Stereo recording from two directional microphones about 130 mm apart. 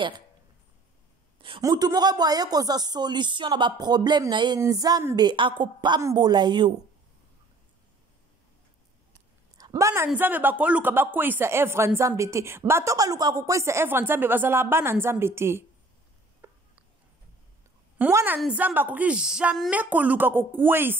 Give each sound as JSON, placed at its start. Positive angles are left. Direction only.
{"t": 1.6, "sound": "speech", "side_deg": -30}
{"t": 9.6, "sound": "a sound", "side_deg": -25}
{"t": 10.1, "sound": "speech", "side_deg": -15}
{"t": 18.1, "sound": "speech", "side_deg": -15}